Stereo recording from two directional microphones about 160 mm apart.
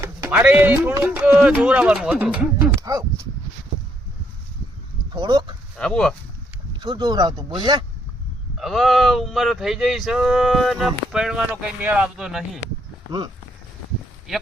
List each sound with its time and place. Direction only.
0.0 s speech: 15° right (ahead or behind)
2.8 s speech: 20° right (ahead or behind)
5.1 s speech: 25° right (ahead or behind)
5.7 s speech: 5° left (ahead or behind)
6.7 s speech: 25° right (ahead or behind)
8.5 s speech: centre (ahead or behind)
13.1 s speech: 25° right (ahead or behind)
14.3 s speech: centre (ahead or behind)